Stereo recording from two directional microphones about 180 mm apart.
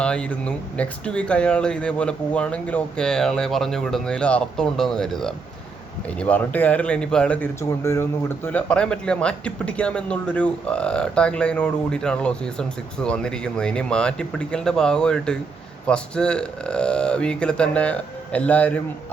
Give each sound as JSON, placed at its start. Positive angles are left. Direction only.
{"t": 0.0, "sound": "speech", "side_deg": 5}